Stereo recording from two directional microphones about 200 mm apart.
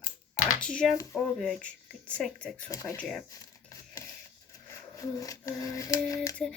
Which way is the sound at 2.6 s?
15° left (ahead or behind).